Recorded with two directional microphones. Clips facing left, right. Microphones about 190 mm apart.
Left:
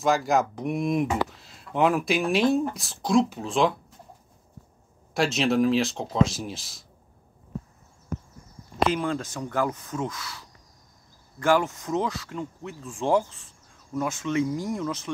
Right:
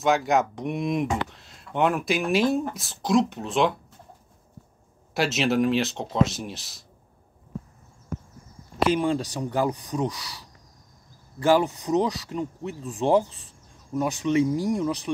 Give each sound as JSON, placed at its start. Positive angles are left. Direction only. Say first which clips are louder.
{"t": 0.0, "sound": "speech", "louder": "right 1 dB", "side_deg": 0}
{"t": 5.1, "sound": "speech", "louder": "even", "side_deg": 0}
{"t": 8.8, "sound": "speech", "louder": "right 3 dB", "side_deg": -15}